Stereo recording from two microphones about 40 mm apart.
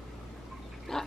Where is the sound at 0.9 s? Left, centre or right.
Centre.